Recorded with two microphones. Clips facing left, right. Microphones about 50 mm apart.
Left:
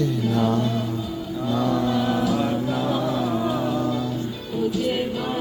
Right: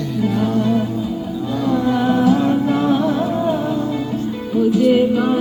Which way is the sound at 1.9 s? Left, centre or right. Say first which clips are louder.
Right 7 dB; right.